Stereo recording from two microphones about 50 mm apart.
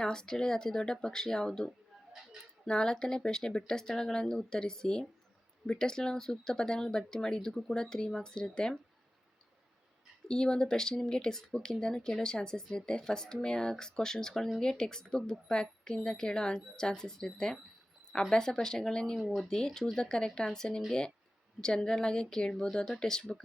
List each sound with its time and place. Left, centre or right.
0.0 s speech: centre
10.2 s speech: centre